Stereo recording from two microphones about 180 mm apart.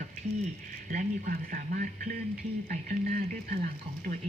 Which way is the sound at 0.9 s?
45° right (ahead or behind).